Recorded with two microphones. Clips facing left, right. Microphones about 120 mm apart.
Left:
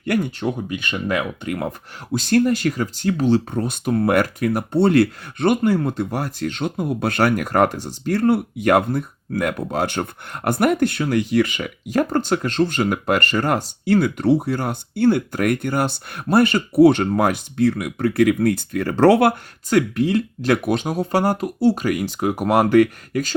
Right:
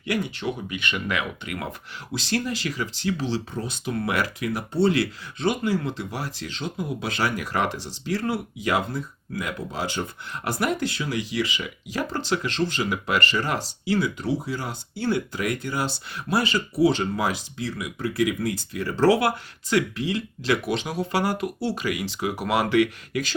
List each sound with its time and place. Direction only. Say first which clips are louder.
0.0 s speech: left 5 dB; 50° left (ahead or behind)